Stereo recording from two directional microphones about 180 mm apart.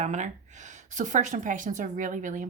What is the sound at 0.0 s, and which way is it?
A woman's voice, 40° right (ahead or behind).